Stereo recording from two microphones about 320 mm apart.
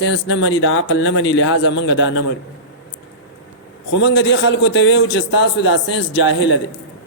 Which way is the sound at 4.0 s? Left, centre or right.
Left.